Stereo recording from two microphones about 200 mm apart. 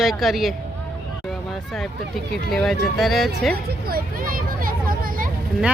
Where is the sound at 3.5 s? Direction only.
50° right (ahead or behind).